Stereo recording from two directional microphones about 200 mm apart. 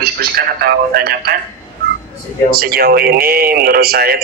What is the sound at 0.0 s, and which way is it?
Speech, 50° right (ahead or behind).